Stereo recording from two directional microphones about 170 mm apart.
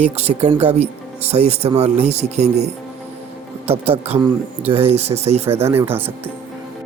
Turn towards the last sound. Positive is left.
turn(degrees=-10)  # may be behind; listen again after turning